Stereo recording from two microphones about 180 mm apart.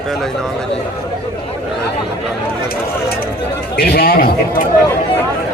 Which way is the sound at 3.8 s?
55° left (ahead or behind).